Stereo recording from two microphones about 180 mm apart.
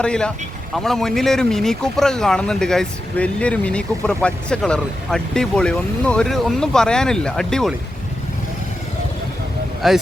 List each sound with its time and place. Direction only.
0.0 s speech: 5° left (ahead or behind)
9.8 s speech: centre (ahead or behind)